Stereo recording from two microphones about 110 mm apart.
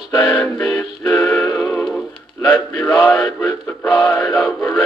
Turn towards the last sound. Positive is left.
turn(degrees=5)  # may be behind; listen again after turning